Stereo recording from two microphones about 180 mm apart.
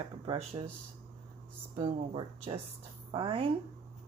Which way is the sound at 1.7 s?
30° right (ahead or behind).